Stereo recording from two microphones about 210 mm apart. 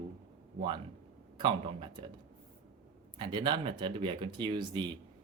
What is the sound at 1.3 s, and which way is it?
Speech, 20° right (ahead or behind).